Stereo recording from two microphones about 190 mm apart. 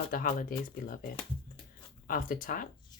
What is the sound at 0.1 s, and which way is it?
Speech, 50° left (ahead or behind).